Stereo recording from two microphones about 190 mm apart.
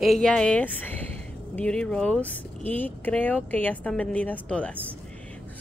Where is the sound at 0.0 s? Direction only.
Centre (ahead or behind).